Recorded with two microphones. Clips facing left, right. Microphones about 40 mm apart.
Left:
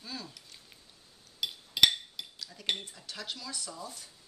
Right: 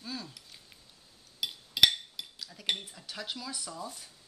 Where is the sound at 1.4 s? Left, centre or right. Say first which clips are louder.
Even; centre.